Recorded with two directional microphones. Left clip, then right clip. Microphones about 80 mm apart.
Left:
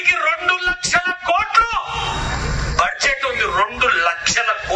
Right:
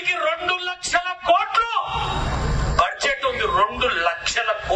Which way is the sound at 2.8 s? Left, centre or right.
Right.